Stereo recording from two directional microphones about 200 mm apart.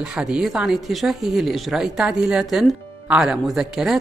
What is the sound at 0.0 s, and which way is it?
A woman's voice, 5° right (ahead or behind).